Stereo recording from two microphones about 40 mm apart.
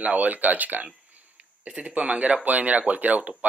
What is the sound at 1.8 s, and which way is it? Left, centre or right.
Speech, right.